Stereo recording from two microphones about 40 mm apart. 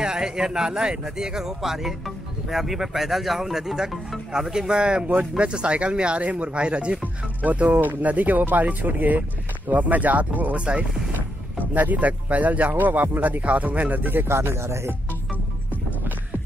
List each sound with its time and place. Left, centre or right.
0.0 s speech: centre
7.4 s speech: right
10.6 s speech: right
11.7 s speech: right
14.2 s speech: right